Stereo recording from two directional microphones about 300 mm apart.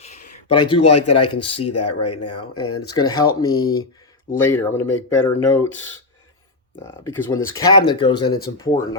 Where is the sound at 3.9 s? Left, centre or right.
Centre.